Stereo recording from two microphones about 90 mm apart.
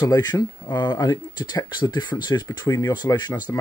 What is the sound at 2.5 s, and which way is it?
Speech, 45° left (ahead or behind).